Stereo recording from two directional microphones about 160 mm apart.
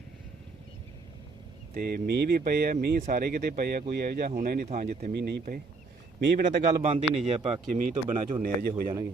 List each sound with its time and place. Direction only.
1.7 s speech: 70° right (ahead or behind)
4.7 s a man's voice: 50° right (ahead or behind)
5.1 s a man's voice: 85° right
6.4 s a man's voice: 45° right (ahead or behind)
7.7 s speech: 55° right (ahead or behind)